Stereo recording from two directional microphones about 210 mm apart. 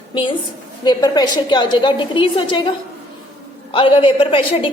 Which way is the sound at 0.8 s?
20° left (ahead or behind).